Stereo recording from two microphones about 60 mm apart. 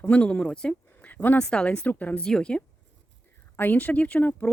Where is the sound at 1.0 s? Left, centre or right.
Left.